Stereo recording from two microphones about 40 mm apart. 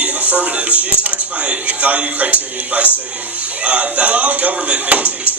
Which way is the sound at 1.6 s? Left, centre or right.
Right.